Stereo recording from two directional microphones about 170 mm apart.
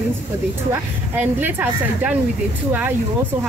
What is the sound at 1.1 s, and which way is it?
Speech, 10° right (ahead or behind).